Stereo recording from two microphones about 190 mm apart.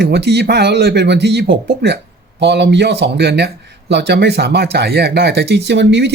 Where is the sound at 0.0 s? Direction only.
60° right (ahead or behind).